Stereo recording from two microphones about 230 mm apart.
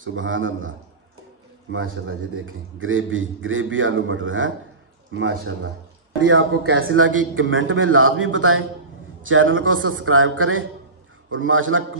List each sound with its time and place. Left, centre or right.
0.0 s a man's voice: right